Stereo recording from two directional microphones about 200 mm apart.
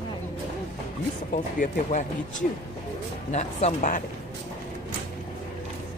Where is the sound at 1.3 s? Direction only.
40° left (ahead or behind).